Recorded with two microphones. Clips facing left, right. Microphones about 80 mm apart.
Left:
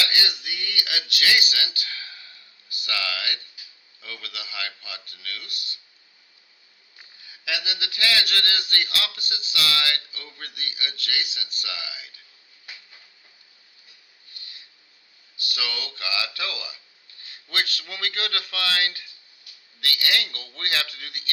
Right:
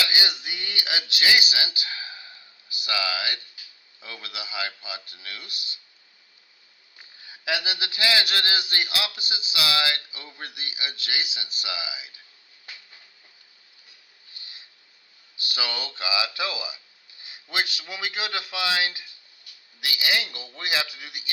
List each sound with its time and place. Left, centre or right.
0.0 s hiccup: centre
0.4 s a sound: right
4.0 s speech: right
7.2 s a man's voice: right
14.3 s a sound: right
15.4 s a man's voice: right